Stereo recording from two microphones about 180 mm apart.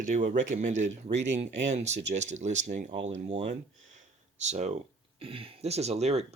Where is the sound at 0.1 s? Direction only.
45° right (ahead or behind).